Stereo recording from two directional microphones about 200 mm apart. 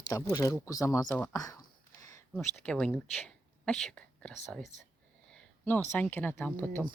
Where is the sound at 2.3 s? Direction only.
5° left (ahead or behind).